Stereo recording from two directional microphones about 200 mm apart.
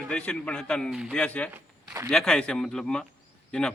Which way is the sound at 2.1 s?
5° left (ahead or behind).